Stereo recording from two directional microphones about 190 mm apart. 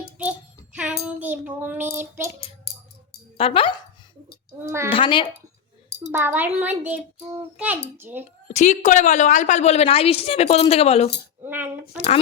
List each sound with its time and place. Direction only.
0.0 s child singing: 5° right (ahead or behind)
2.0 s a child's voice: 10° right (ahead or behind)
3.3 s speech: 30° left (ahead or behind)
4.9 s speech: 25° left (ahead or behind)
6.1 s a child's voice: 10° right (ahead or behind)
8.4 s a woman's voice: 40° left (ahead or behind)
11.4 s a child's voice: 10° right (ahead or behind)